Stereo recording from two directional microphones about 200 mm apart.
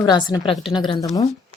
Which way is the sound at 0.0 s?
20° left (ahead or behind).